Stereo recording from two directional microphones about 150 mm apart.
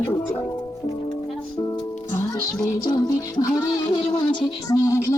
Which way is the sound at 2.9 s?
25° left (ahead or behind).